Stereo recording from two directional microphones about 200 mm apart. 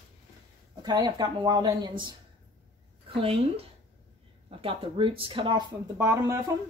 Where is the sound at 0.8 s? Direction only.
20° right (ahead or behind).